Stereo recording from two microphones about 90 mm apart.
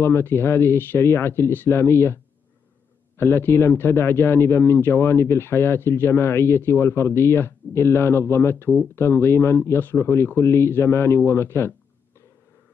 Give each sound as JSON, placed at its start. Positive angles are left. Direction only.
{"t": 0.0, "sound": "a man's voice", "side_deg": 30}
{"t": 3.2, "sound": "a man's voice", "side_deg": 25}